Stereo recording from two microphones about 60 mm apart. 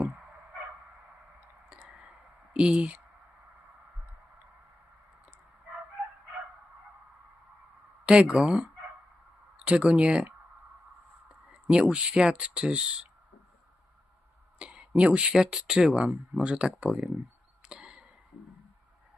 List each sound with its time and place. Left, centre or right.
1.8 s clicking: centre
8.0 s speech: centre
11.7 s speech: centre
14.6 s a sound: centre
15.3 s speech: centre
16.7 s speech: centre
17.6 s arrow: centre